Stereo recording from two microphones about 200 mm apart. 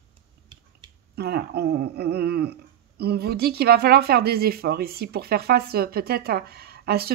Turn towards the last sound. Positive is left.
turn(degrees=-50)  # may be behind; listen again after turning